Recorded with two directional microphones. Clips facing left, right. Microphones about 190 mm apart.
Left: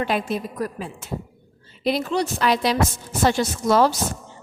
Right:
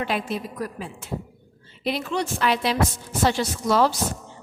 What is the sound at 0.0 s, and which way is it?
A woman's voice, 45° left (ahead or behind).